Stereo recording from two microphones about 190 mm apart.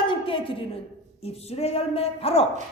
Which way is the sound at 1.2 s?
35° left (ahead or behind).